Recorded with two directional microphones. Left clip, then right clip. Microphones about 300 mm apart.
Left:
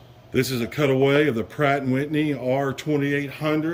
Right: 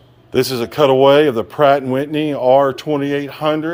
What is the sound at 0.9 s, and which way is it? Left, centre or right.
Speech, centre.